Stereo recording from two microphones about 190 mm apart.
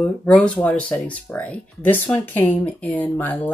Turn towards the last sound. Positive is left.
turn(degrees=10)  # may be behind; listen again after turning